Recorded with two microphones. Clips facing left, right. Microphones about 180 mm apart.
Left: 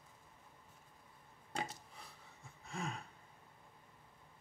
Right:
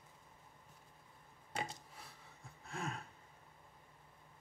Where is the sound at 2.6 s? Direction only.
Centre (ahead or behind).